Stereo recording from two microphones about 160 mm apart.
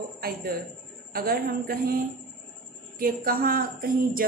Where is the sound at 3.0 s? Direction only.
65° right (ahead or behind).